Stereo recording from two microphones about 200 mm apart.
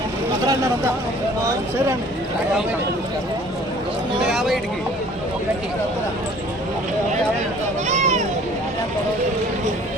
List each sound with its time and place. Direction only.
0.4 s speech: 20° right (ahead or behind)
4.3 s speech: centre (ahead or behind)
7.9 s speech: 35° right (ahead or behind)